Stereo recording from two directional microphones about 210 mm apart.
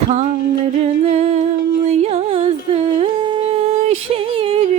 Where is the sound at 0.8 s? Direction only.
30° right (ahead or behind).